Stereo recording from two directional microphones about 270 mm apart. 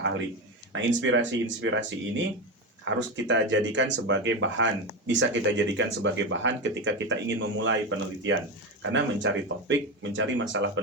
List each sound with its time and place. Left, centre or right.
0.7 s speech: right